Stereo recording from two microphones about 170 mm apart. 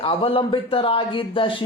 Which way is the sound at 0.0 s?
35° left (ahead or behind).